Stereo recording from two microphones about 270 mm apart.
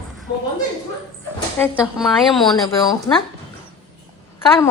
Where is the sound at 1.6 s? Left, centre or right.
Centre.